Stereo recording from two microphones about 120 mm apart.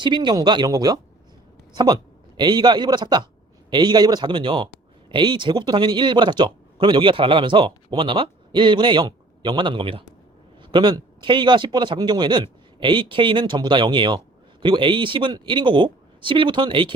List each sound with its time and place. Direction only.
0.0 s a woman's voice: 40° right (ahead or behind)